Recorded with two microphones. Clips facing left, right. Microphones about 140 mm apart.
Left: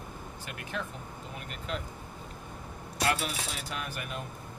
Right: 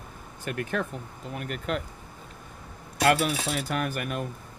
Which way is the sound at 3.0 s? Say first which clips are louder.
Right 8 dB; 65° right (ahead or behind).